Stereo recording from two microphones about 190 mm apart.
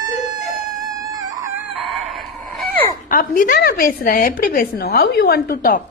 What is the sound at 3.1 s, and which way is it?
A woman's voice, 45° left (ahead or behind).